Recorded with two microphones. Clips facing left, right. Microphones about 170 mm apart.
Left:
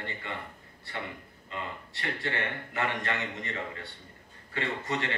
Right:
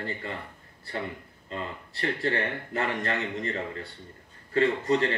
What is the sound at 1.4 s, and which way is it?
A man's voice, 35° right (ahead or behind).